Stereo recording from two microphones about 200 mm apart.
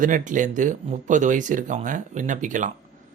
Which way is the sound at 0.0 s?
40° right (ahead or behind).